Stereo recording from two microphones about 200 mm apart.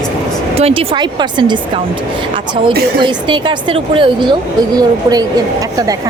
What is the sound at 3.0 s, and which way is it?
A woman's voice, 25° right (ahead or behind).